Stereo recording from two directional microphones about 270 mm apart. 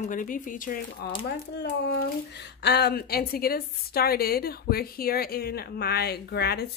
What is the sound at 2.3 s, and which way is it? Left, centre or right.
A woman's voice, left.